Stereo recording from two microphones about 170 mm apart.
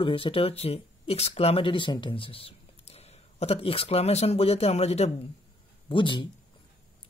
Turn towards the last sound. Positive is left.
turn(degrees=30)  # may be behind; listen again after turning